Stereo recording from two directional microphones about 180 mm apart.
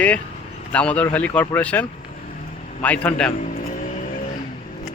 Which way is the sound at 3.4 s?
40° left (ahead or behind).